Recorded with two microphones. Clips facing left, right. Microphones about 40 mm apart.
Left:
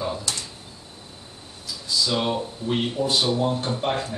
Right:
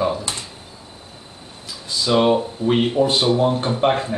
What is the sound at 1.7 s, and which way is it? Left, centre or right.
Speech, right.